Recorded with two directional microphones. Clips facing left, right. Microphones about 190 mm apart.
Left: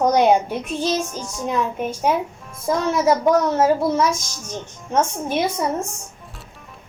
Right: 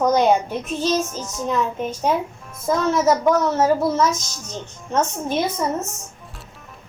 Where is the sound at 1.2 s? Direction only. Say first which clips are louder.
Right 1 dB; 5° right (ahead or behind).